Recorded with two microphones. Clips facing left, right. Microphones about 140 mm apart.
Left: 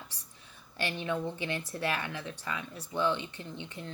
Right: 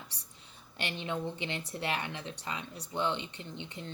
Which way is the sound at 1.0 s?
20° right (ahead or behind).